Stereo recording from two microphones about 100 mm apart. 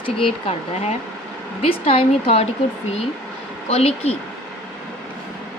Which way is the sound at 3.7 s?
90° left.